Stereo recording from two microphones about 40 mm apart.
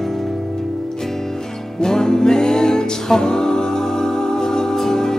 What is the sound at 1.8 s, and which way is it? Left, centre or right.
Music, centre.